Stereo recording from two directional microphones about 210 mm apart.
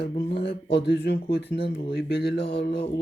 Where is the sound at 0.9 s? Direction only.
50° left (ahead or behind).